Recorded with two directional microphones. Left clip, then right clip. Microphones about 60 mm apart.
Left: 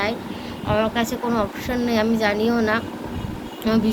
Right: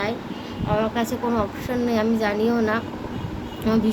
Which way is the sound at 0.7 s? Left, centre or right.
Centre.